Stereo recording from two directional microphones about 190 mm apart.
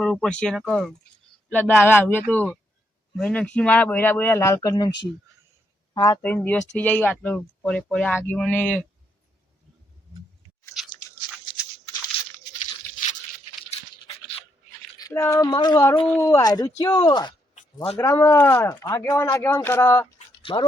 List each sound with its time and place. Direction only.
0.0 s speech: 5° left (ahead or behind)
5.9 s speech: 20° left (ahead or behind)
6.2 s speech: 10° left (ahead or behind)
10.8 s biting: centre (ahead or behind)
14.9 s speech: 15° left (ahead or behind)
20.1 s a sound: 25° left (ahead or behind)